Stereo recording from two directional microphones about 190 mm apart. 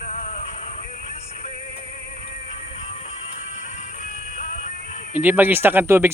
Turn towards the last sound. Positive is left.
turn(degrees=-10)  # may be behind; listen again after turning